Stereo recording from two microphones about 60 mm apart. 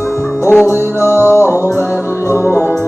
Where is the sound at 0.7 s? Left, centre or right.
Left.